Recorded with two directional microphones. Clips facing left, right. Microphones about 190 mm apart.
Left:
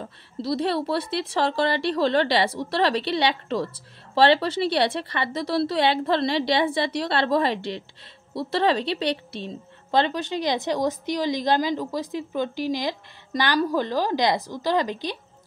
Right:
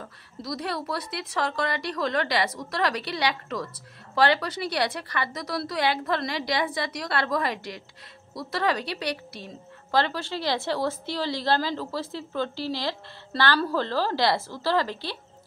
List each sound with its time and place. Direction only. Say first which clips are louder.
0.0 s a woman's voice: left 7 dB; 30° left (ahead or behind)